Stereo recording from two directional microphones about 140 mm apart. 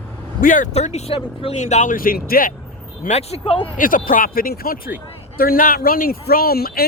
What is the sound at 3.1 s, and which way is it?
Speech, 50° left (ahead or behind).